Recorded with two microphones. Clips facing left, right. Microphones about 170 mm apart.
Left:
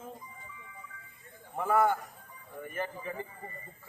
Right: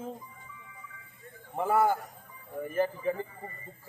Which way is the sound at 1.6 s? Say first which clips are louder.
Right 1 dB; 30° right (ahead or behind).